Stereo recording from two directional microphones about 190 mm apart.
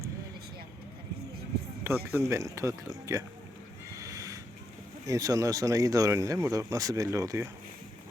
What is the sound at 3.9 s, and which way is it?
Snort, 15° right (ahead or behind).